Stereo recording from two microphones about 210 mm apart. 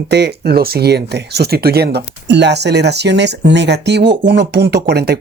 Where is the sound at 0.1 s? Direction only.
50° right (ahead or behind).